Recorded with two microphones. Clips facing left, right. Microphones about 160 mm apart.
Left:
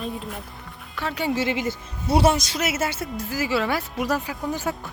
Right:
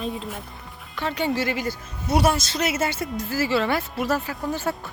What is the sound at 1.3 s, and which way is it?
Speech, 20° left (ahead or behind).